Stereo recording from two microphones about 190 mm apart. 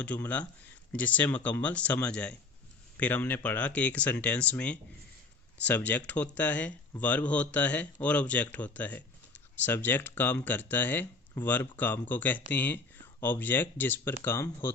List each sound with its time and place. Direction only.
0.0 s speech: 5° left (ahead or behind)